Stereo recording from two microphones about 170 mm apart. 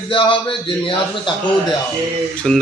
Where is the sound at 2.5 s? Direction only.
5° left (ahead or behind).